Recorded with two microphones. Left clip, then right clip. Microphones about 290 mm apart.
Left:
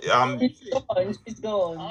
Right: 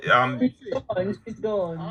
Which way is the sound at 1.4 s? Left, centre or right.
Centre.